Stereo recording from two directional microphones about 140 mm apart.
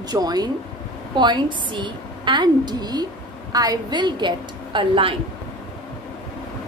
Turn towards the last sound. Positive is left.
turn(degrees=-35)  # may be behind; listen again after turning